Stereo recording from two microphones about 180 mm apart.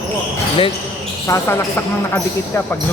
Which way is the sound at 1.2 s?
15° left (ahead or behind).